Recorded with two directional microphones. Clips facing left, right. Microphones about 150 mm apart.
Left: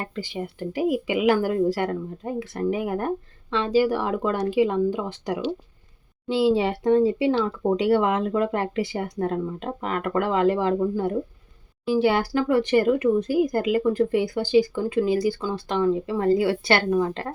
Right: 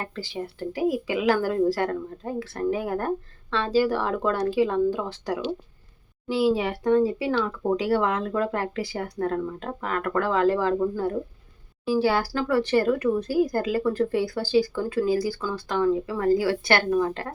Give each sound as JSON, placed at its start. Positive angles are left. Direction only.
{"t": 0.0, "sound": "a woman's voice", "side_deg": 20}
{"t": 6.2, "sound": "speech", "side_deg": 25}